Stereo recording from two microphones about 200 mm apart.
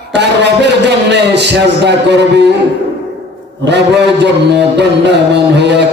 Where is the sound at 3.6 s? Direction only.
60° right (ahead or behind).